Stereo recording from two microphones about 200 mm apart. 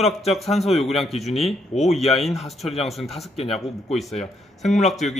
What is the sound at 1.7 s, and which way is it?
Speech, 35° left (ahead or behind).